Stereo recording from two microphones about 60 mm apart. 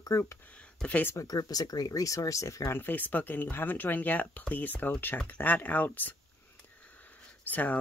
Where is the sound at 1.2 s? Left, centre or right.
Left.